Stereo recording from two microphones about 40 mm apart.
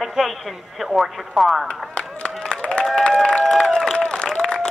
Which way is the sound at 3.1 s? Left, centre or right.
Centre.